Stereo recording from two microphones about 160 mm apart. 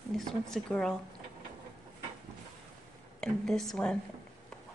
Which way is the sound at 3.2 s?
5° left (ahead or behind).